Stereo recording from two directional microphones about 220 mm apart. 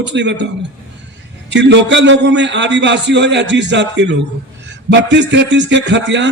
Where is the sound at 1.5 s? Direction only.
55° right (ahead or behind).